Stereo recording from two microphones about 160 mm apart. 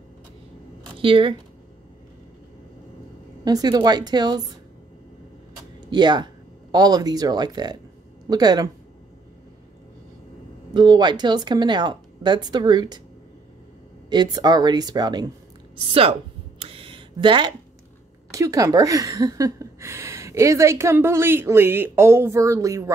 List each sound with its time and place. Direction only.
0.9 s speech: 35° right (ahead or behind)
3.4 s a woman's voice: 25° right (ahead or behind)
5.9 s a woman's voice: 30° right (ahead or behind)
10.7 s a woman's voice: 25° right (ahead or behind)
14.0 s a woman's voice: 25° right (ahead or behind)
15.7 s a sound: 35° right (ahead or behind)
18.3 s a woman's voice: 20° right (ahead or behind)